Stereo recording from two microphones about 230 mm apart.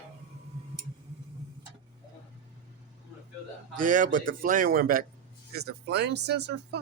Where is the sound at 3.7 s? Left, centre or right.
Right.